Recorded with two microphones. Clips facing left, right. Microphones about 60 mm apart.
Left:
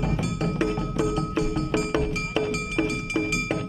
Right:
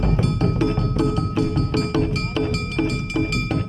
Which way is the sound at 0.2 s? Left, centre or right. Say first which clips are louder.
Right 5 dB; centre.